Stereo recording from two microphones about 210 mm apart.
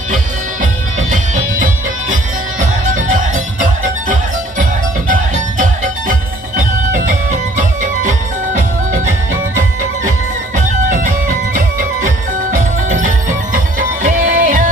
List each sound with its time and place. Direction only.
0.6 s music: 40° right (ahead or behind)
5.0 s music: 40° right (ahead or behind)
10.5 s music: 40° right (ahead or behind)